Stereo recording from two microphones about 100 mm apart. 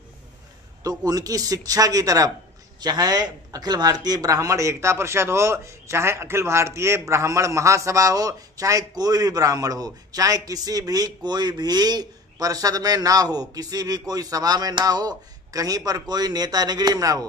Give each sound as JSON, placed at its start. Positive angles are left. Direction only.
{"t": 0.8, "sound": "a man's voice", "side_deg": -40}